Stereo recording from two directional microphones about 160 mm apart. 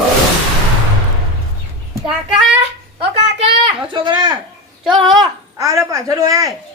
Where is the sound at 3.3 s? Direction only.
35° right (ahead or behind).